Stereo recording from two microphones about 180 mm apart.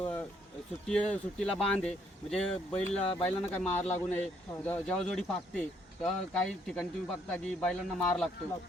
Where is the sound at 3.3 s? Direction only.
10° left (ahead or behind).